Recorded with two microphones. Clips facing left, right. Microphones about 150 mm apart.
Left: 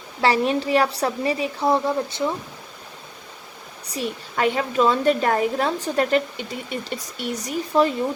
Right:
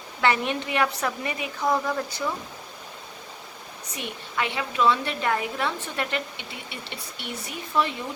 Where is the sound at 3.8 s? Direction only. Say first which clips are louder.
Left 8 dB; 35° left (ahead or behind).